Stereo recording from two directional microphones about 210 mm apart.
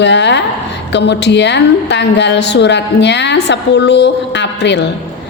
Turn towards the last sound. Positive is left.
turn(degrees=55)  # may be behind; listen again after turning